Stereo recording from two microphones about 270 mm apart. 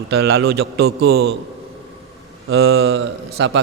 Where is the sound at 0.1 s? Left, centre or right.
Right.